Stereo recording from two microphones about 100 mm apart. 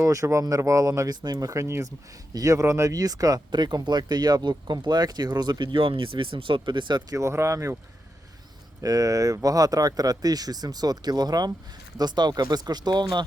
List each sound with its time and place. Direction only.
0.0 s speech: 30° right (ahead or behind); by 7.2 s 50° right (ahead or behind)
7.2 s speech: 30° right (ahead or behind)
8.8 s speech: 35° right (ahead or behind)